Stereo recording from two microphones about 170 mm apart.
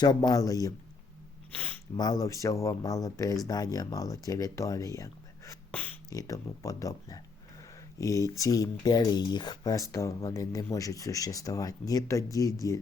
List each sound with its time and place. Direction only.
0.0 s speech: 25° left (ahead or behind)
2.0 s speech: 20° left (ahead or behind)
5.7 s beatboxing: 10° left (ahead or behind)
6.1 s speech: 20° left (ahead or behind)